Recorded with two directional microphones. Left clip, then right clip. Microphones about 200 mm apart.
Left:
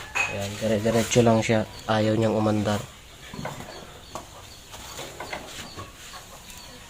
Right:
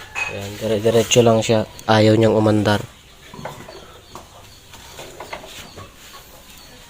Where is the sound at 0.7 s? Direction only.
25° right (ahead or behind).